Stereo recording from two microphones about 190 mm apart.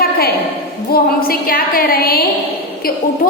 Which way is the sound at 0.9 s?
50° left (ahead or behind).